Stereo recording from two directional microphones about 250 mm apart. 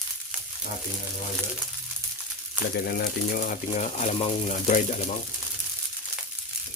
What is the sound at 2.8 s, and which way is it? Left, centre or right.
Speech, left.